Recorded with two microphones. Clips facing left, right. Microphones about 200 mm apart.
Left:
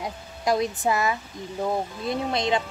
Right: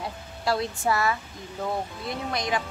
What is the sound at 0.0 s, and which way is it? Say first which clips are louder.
A woman's voice: left 2 dB; 15° left (ahead or behind).